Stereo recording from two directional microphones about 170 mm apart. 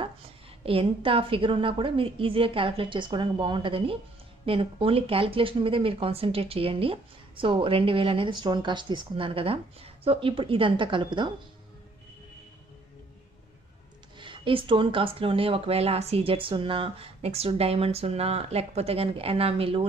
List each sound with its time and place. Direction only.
0.7 s speech: 30° right (ahead or behind)
14.1 s speech: 30° right (ahead or behind)